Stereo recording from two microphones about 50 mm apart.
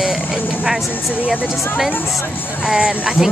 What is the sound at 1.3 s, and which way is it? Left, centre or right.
A woman's voice, centre.